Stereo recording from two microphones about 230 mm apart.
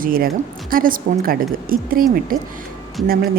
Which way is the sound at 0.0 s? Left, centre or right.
Right.